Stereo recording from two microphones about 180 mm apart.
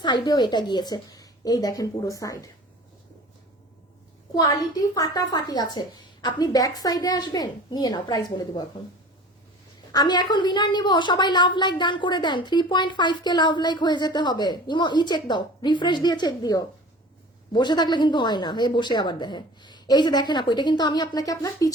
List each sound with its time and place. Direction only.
0.0 s a woman's voice: 25° left (ahead or behind)
4.4 s a woman's voice: 20° left (ahead or behind)
9.9 s a woman's voice: 25° left (ahead or behind)